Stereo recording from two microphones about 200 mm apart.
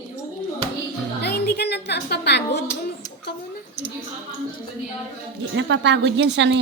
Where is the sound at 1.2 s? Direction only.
55° left (ahead or behind).